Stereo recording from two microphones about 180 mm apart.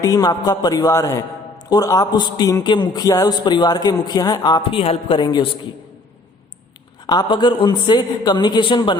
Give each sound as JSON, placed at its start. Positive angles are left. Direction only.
{"t": 0.0, "sound": "a man's voice", "side_deg": 20}
{"t": 7.1, "sound": "a man's voice", "side_deg": 25}